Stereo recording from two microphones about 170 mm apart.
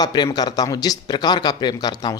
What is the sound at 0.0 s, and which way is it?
Speech, 25° left (ahead or behind).